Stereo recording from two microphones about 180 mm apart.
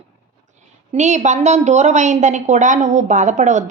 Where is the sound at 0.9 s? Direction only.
40° right (ahead or behind).